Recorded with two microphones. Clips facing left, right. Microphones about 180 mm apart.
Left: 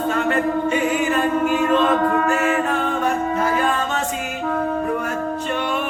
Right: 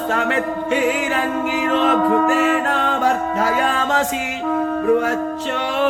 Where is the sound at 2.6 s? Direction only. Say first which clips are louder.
Right 2 dB; 80° right.